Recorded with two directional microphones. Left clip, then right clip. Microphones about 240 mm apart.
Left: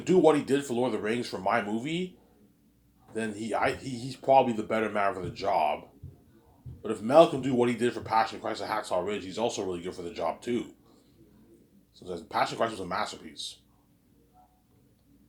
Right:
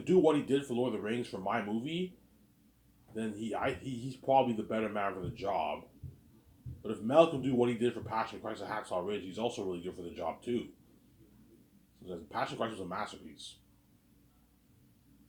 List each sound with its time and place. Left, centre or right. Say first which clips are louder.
0.0 s speech: left 5 dB; left
3.2 s speech: left 7 dB; left
6.8 s speech: left 6 dB; left
12.0 s speech: left 8 dB; left